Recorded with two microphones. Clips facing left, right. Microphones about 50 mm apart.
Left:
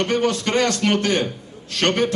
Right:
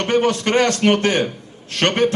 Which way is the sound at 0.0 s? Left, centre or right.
Right.